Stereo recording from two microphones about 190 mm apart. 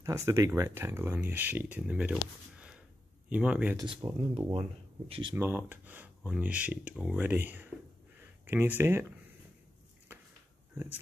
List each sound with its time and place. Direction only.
0.0 s speech: 15° right (ahead or behind)
3.3 s speech: 5° right (ahead or behind)
3.7 s speech: 25° right (ahead or behind)
5.3 s speech: 10° right (ahead or behind)